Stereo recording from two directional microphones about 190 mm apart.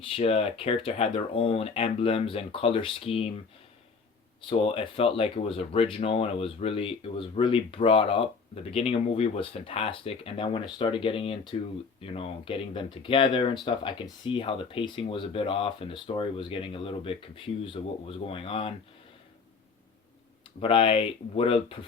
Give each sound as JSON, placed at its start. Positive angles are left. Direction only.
{"t": 0.0, "sound": "speech", "side_deg": 30}
{"t": 4.4, "sound": "speech", "side_deg": 30}
{"t": 20.6, "sound": "speech", "side_deg": 30}